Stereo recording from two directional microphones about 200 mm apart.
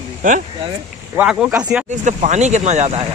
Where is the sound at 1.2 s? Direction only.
5° right (ahead or behind).